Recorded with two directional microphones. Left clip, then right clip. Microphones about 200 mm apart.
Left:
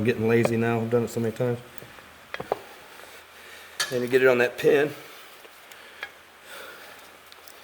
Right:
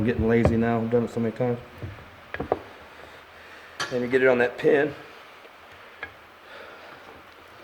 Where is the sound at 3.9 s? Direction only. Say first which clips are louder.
Even; 45° left (ahead or behind).